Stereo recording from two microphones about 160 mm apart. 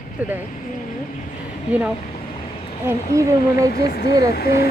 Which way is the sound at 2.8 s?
20° right (ahead or behind).